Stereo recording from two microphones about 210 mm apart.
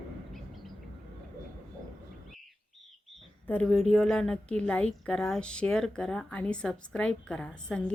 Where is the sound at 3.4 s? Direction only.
5° left (ahead or behind).